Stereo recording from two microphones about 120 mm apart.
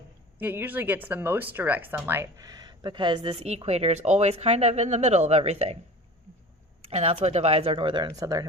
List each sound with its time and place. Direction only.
0.3 s speech: 15° right (ahead or behind)
2.4 s speech: 30° right (ahead or behind); by 5.7 s 60° right (ahead or behind)
6.8 s speech: 60° right (ahead or behind); by 8.4 s 30° right (ahead or behind)